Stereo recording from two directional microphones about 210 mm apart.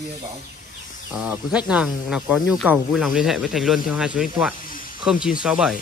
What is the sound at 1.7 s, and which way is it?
Speech, 5° right (ahead or behind).